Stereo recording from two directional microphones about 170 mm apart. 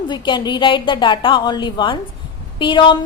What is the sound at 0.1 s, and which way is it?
A woman's voice, 25° left (ahead or behind).